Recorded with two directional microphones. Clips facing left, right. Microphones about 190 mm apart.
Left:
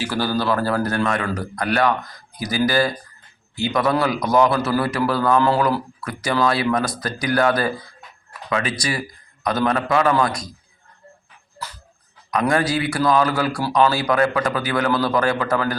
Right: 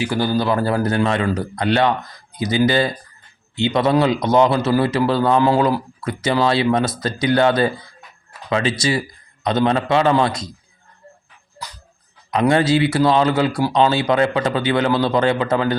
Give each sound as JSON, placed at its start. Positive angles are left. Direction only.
{"t": 0.0, "sound": "a man's voice", "side_deg": -20}
{"t": 12.3, "sound": "a man's voice", "side_deg": -25}